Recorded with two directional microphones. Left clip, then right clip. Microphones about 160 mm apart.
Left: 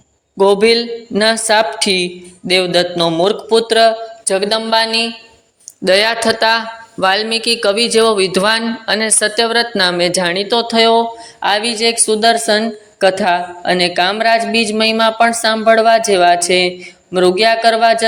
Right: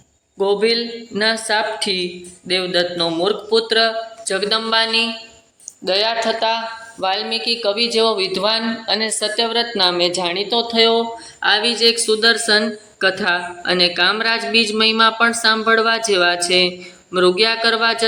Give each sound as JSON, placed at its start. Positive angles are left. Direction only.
{"t": 0.3, "sound": "speech", "side_deg": 40}
{"t": 5.8, "sound": "speech", "side_deg": 60}